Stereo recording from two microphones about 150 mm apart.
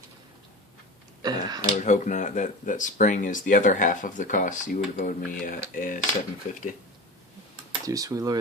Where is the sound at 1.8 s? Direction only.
55° left (ahead or behind).